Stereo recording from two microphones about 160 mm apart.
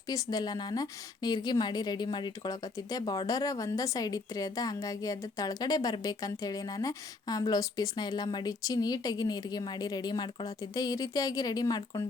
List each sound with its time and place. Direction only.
0.1 s a woman's voice: 20° left (ahead or behind)